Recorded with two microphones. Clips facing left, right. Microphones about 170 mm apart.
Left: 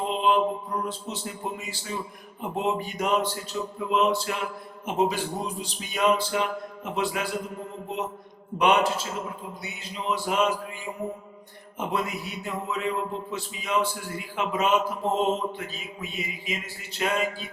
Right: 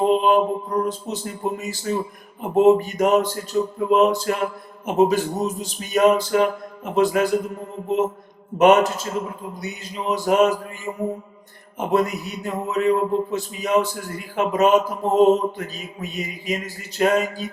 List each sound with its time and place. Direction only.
0.0 s a man's voice: 45° right (ahead or behind)